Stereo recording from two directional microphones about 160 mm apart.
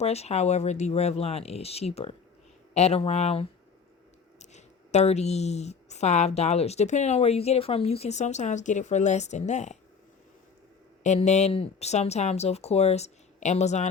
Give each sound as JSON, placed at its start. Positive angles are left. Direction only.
{"t": 0.0, "sound": "a woman's voice", "side_deg": 40}
{"t": 11.0, "sound": "a woman's voice", "side_deg": 45}